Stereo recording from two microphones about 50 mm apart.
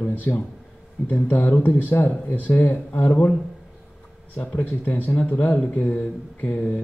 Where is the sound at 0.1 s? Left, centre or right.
Left.